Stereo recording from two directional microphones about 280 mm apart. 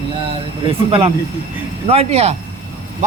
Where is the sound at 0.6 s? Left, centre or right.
Centre.